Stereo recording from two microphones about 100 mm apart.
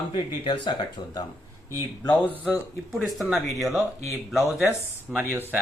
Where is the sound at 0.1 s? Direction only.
50° left (ahead or behind).